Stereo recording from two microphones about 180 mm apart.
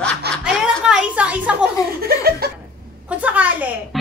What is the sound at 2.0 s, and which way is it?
Speech, 60° right (ahead or behind).